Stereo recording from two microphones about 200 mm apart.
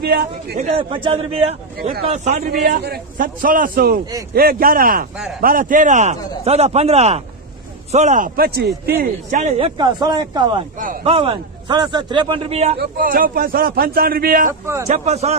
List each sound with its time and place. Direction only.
0.0 s speech: 50° right (ahead or behind)
0.6 s a man's voice: 30° right (ahead or behind)
2.3 s a man's voice: 50° right (ahead or behind)
9.4 s a man's voice: 35° right (ahead or behind)
9.8 s a man's voice: 20° right (ahead or behind)
12.7 s speech: 45° right (ahead or behind)
14.9 s a man's voice: 35° right (ahead or behind)